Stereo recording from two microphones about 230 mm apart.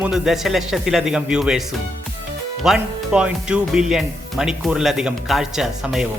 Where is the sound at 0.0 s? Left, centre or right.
Centre.